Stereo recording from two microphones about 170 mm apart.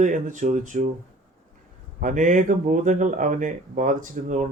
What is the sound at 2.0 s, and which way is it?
Speech, 50° right (ahead or behind).